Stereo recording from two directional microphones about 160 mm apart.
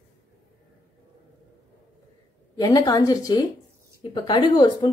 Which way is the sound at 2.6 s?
20° left (ahead or behind).